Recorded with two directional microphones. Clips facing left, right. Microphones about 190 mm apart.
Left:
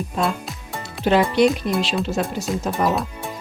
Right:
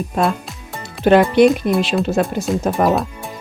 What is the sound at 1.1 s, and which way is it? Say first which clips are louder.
Speech: right 5 dB; 55° right (ahead or behind).